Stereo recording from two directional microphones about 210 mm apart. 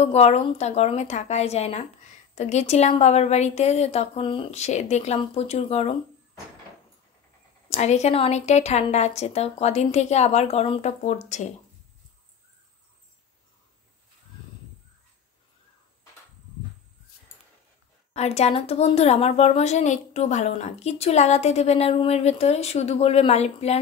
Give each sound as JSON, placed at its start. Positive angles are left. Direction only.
{"t": 0.0, "sound": "a woman's voice", "side_deg": 30}
{"t": 7.7, "sound": "a woman's voice", "side_deg": 30}
{"t": 18.1, "sound": "a woman's voice", "side_deg": 30}